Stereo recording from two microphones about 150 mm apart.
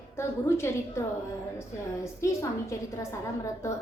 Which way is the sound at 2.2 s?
20° left (ahead or behind).